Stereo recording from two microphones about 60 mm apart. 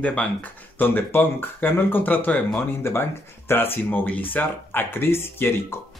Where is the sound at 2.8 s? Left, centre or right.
Left.